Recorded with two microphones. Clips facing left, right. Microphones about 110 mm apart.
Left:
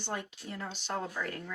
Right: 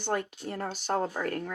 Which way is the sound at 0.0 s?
50° right (ahead or behind).